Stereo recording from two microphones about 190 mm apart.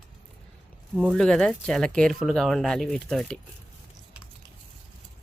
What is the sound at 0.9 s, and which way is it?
Speech, centre (ahead or behind).